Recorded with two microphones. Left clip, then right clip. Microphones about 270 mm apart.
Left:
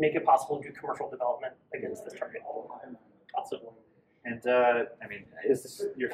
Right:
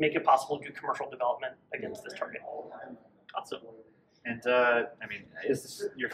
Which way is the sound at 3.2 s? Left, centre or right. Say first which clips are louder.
Left 3 dB; centre.